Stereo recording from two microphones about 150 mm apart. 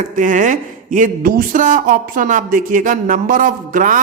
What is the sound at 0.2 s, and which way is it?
Speech, 60° right (ahead or behind).